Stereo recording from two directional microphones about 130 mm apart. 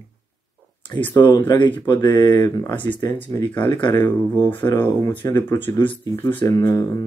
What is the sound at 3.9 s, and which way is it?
Speech, 15° left (ahead or behind).